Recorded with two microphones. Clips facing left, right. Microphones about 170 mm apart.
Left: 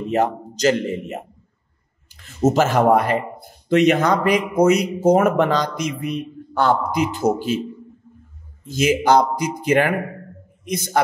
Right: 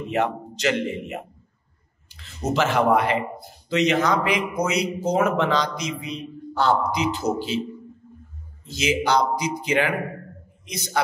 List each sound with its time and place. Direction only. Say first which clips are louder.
0.1 s a man's voice: left 4 dB; 40° left (ahead or behind)
8.6 s speech: left 6 dB; 50° left (ahead or behind)